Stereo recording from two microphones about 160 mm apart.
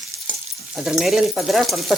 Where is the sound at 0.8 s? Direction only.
5° right (ahead or behind).